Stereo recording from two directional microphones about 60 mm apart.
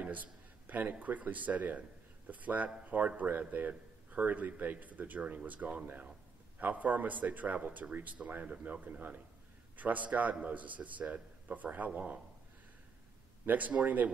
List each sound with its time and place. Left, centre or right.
0.0 s speech: right
13.5 s speech: right